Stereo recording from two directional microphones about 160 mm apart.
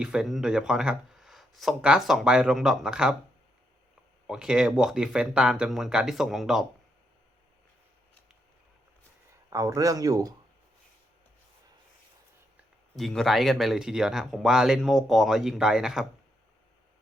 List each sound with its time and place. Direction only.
0.0 s speech: 5° right (ahead or behind)
4.3 s speech: 5° right (ahead or behind)
9.5 s speech: 20° right (ahead or behind)
13.0 s speech: centre (ahead or behind)